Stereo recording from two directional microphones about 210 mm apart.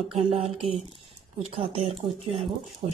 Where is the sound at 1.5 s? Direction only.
25° right (ahead or behind).